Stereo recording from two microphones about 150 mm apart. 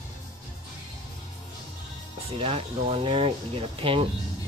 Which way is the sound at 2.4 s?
40° right (ahead or behind).